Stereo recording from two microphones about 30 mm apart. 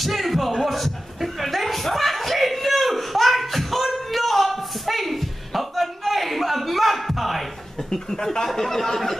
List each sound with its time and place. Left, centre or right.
0.0 s music: centre
0.5 s chuckle: centre
7.9 s speech: centre